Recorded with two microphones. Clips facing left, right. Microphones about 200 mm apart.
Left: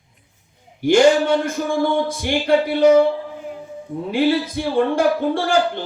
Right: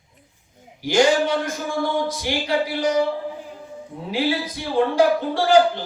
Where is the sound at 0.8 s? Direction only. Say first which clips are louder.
Left 4 dB; 55° left (ahead or behind).